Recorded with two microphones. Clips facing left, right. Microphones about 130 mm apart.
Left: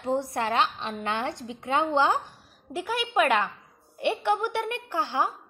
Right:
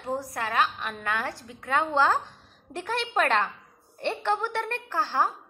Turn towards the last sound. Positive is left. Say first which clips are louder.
# right 1 dB
turn(degrees=15)  # may be behind; listen again after turning